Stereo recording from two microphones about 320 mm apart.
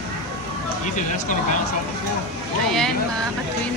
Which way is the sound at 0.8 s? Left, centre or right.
Left.